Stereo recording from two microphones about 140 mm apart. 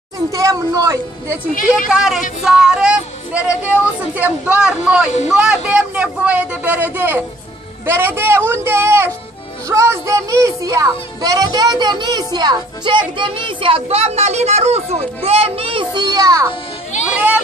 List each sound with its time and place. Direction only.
0.3 s a woman's voice: 25° right (ahead or behind)
1.9 s speech: 5° right (ahead or behind); by 16.4 s 25° right (ahead or behind)